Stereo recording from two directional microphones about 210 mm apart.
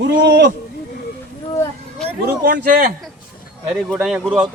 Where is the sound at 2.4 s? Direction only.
50° right (ahead or behind).